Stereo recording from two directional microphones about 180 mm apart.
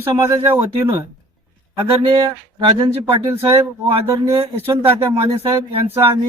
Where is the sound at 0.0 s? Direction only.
15° right (ahead or behind).